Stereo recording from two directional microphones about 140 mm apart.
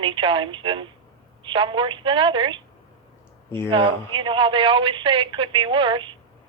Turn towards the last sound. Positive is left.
turn(degrees=-35)  # may be behind; listen again after turning